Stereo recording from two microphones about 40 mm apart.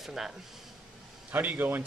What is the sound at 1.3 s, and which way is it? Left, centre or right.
Speech, right.